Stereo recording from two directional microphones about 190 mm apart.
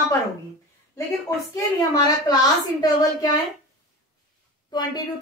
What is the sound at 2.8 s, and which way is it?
Speech, 20° left (ahead or behind).